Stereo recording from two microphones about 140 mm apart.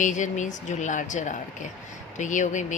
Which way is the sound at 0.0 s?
65° left (ahead or behind).